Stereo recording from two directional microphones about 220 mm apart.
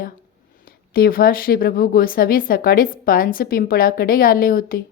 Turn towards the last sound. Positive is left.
turn(degrees=40)  # may be behind; listen again after turning